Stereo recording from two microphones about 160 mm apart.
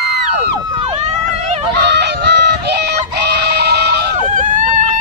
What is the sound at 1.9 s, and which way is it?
Synthetic singing, 90° right.